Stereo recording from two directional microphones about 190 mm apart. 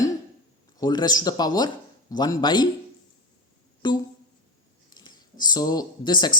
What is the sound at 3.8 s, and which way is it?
A man's voice, 20° left (ahead or behind).